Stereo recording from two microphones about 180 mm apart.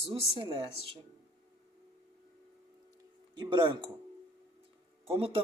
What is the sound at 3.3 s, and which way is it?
Speech, 25° right (ahead or behind).